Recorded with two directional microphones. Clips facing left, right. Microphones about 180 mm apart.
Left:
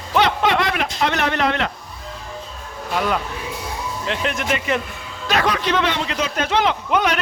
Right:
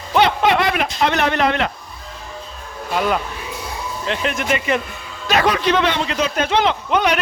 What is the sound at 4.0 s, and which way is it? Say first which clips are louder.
Speech: right 2 dB; centre (ahead or behind).